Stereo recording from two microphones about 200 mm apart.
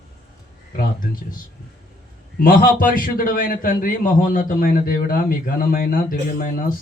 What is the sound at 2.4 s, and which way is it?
A man's voice, 45° left (ahead or behind).